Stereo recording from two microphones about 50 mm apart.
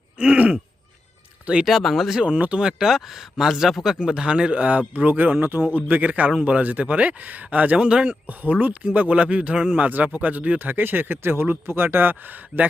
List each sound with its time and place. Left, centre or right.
0.2 s speech: right
1.6 s speech: centre
2.2 s speech: right
2.6 s speech: centre
4.0 s speech: centre
8.0 s speech: right